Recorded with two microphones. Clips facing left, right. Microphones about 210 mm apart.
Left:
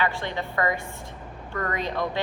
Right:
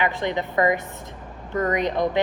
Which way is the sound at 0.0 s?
20° right (ahead or behind).